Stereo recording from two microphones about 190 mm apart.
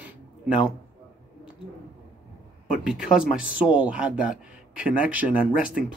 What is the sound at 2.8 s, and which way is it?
A man's voice, 5° right (ahead or behind).